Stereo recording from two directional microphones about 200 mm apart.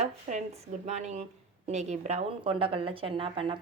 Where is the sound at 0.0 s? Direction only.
35° right (ahead or behind).